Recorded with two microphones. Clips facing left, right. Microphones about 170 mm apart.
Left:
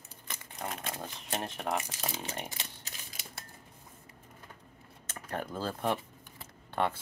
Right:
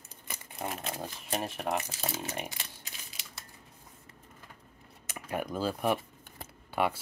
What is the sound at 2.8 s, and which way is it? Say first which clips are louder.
Typewriter: left 1 dB; 45° left (ahead or behind).